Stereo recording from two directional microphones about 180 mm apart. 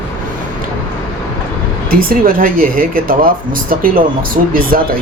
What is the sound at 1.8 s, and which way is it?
Speech, 55° right (ahead or behind).